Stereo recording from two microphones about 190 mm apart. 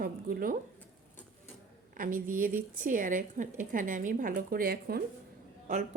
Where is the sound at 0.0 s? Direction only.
50° right (ahead or behind).